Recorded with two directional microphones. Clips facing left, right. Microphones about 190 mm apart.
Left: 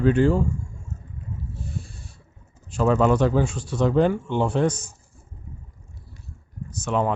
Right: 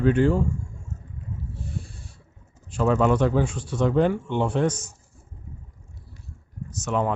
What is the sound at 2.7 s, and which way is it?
Speech, 35° left (ahead or behind).